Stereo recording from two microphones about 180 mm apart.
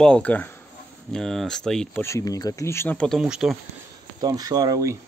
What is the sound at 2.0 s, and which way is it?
Speech, 20° left (ahead or behind).